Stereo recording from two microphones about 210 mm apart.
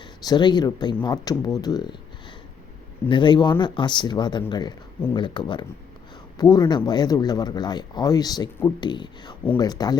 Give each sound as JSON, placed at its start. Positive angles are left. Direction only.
{"t": 0.3, "sound": "speech", "side_deg": 20}
{"t": 3.1, "sound": "speech", "side_deg": 20}